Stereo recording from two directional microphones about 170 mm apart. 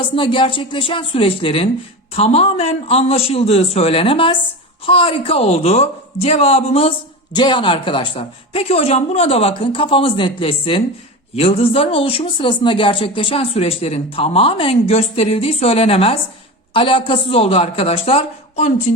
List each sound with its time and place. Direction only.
0.2 s speech: 30° left (ahead or behind)